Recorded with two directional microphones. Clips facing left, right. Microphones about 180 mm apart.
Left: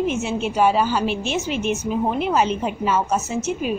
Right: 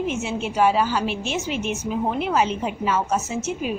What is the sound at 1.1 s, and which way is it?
Speech, 10° right (ahead or behind).